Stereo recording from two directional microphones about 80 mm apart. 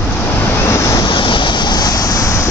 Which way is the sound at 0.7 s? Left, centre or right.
Left.